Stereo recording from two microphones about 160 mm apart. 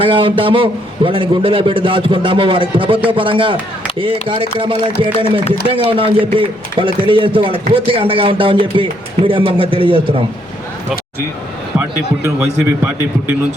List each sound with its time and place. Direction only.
0.0 s a man's voice: 35° right (ahead or behind)
11.8 s speech: 15° right (ahead or behind)